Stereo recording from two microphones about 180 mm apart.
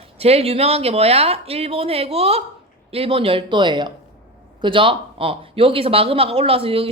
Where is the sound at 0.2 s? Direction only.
35° right (ahead or behind).